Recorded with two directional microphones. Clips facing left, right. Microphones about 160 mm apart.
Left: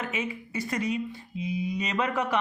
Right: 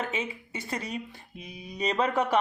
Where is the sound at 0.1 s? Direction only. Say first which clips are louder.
Left 1 dB; 30° right (ahead or behind).